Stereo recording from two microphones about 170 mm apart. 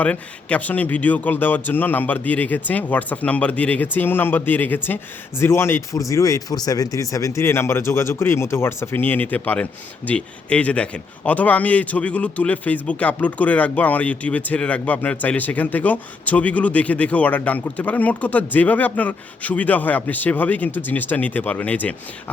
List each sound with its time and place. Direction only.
0.0 s speech: 5° left (ahead or behind)